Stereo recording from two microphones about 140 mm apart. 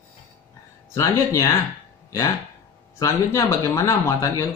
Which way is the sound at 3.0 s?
20° left (ahead or behind).